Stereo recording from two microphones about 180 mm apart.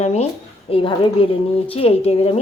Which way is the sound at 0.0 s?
35° left (ahead or behind).